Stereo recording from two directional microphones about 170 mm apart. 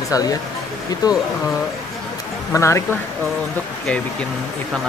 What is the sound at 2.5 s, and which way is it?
Speech, 15° left (ahead or behind).